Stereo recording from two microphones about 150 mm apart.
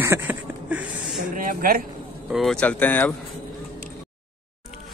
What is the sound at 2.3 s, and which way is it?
Speech, 5° left (ahead or behind).